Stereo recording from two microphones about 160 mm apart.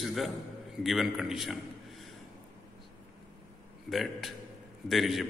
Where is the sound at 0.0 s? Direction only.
Centre (ahead or behind).